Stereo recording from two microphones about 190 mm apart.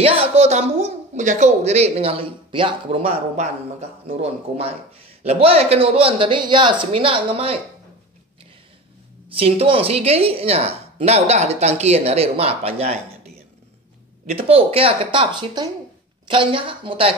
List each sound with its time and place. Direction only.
0.0 s a woman's voice: 30° right (ahead or behind)
9.3 s a woman's voice: 30° right (ahead or behind)
14.3 s speech: 30° right (ahead or behind)